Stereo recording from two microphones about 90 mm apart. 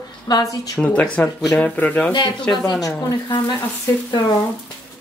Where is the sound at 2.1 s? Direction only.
55° left (ahead or behind).